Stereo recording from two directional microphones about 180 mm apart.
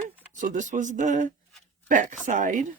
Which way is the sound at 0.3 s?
45° right (ahead or behind).